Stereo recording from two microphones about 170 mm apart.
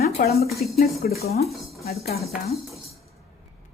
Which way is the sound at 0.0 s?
65° left (ahead or behind).